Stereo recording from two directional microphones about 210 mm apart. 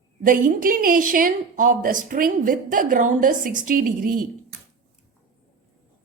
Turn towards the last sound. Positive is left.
turn(degrees=-40)  # may be behind; listen again after turning